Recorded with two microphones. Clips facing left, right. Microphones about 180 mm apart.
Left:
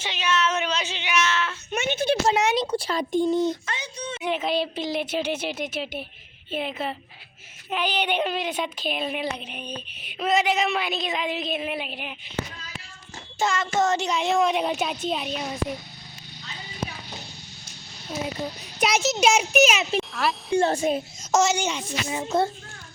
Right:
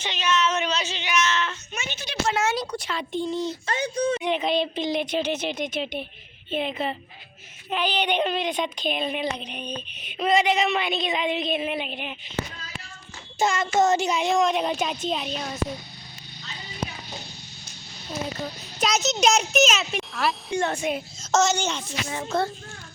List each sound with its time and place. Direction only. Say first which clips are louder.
0.0 s speech: right 1 dB; 10° left (ahead or behind)
1.7 s a sound: left 11 dB; 55° left (ahead or behind)
2.3 s a child's voice: left 3 dB; 20° left (ahead or behind); by 3.5 s 50° left (ahead or behind)
3.8 s speech: right 10 dB; 55° right (ahead or behind)
4.2 s speech: right 1 dB; 5° left (ahead or behind)
13.4 s a sound: right 1 dB; 10° right (ahead or behind)
13.7 s speech: right 3 dB; 10° right (ahead or behind)
19.2 s a woman's voice: left 1 dB; 10° left (ahead or behind)
20.0 s wind chime: left 1 dB; centre (ahead or behind)
20.5 s a child's voice: left 8 dB; 30° left (ahead or behind)
21.2 s a woman's voice: right 2 dB; 10° left (ahead or behind)